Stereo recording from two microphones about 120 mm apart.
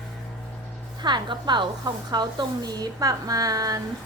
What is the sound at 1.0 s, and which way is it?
A woman's voice, 40° right (ahead or behind).